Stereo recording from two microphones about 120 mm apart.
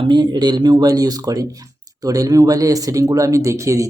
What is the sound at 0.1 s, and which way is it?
Speech, 40° right (ahead or behind).